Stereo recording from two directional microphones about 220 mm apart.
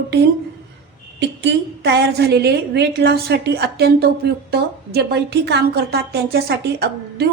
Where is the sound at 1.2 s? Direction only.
55° right (ahead or behind).